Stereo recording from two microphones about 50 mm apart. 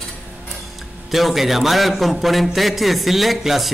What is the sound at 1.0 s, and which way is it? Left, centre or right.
Speech, centre.